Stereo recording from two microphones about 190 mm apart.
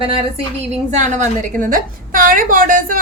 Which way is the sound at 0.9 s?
40° right (ahead or behind).